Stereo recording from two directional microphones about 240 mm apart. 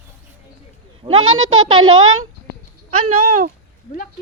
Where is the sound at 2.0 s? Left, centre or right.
Right.